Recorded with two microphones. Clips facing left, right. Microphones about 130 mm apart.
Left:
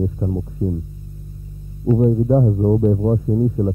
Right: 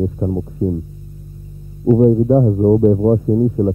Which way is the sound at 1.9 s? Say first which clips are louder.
Right 4 dB; 15° right (ahead or behind).